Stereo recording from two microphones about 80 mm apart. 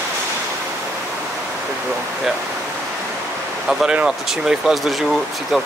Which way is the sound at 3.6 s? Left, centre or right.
Centre.